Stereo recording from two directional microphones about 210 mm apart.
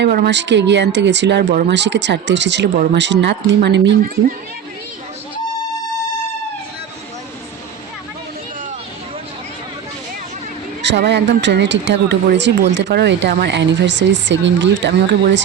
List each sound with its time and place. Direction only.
0.0 s speech: 50° right (ahead or behind)
10.8 s speech: 55° right (ahead or behind)